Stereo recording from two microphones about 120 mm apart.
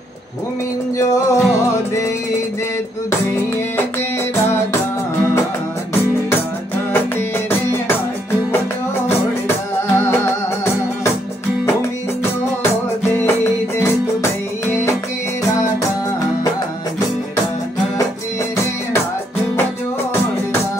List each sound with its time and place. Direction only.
0.9 s music: 25° left (ahead or behind)
9.9 s music: 20° left (ahead or behind)